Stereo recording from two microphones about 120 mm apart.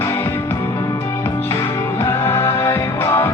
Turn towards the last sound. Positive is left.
turn(degrees=20)  # may be behind; listen again after turning